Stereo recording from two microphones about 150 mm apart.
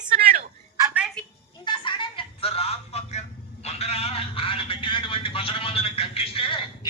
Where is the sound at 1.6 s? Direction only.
30° left (ahead or behind).